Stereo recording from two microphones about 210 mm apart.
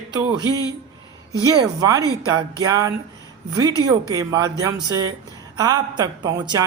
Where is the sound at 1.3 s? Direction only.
15° right (ahead or behind).